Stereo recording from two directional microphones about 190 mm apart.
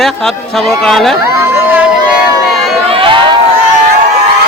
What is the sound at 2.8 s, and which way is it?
Crowd, 30° right (ahead or behind).